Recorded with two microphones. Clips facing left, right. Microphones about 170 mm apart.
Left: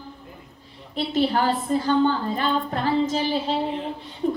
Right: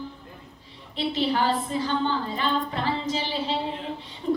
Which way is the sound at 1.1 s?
45° left (ahead or behind).